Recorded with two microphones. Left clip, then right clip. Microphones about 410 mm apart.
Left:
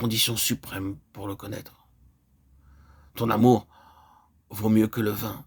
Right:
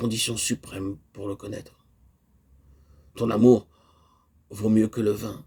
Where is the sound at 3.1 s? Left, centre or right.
Left.